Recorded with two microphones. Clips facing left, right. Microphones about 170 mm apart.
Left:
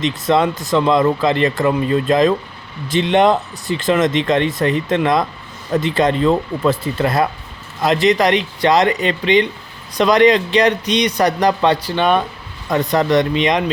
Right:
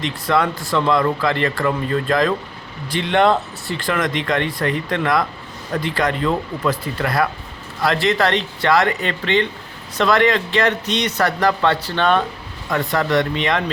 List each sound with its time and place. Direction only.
0.0 s speech: 20° left (ahead or behind)